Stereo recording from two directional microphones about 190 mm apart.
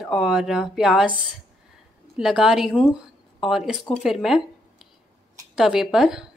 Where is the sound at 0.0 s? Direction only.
Centre (ahead or behind).